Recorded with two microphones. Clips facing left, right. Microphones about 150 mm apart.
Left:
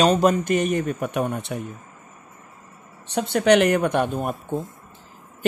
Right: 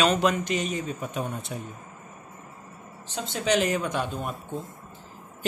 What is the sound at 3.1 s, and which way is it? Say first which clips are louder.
Speech: left 8 dB; 60° left (ahead or behind).